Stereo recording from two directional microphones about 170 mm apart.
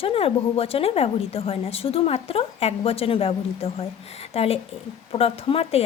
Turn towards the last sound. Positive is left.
turn(degrees=35)  # may be behind; listen again after turning